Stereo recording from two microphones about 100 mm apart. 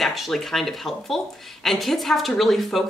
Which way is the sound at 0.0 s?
Centre (ahead or behind).